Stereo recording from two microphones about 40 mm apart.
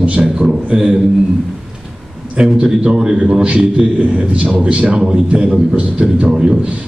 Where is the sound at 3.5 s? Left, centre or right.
Right.